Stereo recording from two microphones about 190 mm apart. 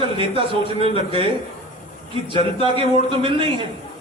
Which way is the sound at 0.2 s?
30° right (ahead or behind).